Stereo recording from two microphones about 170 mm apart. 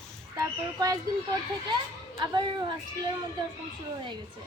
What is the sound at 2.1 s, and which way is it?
Speech, 25° right (ahead or behind).